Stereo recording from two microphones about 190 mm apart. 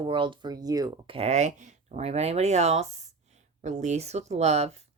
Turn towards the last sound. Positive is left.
turn(degrees=-35)  # may be behind; listen again after turning